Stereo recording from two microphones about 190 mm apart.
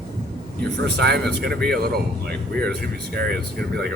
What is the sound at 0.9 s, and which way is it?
Speech, 60° right (ahead or behind).